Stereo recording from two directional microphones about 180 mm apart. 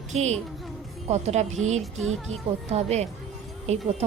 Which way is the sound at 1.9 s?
90° right.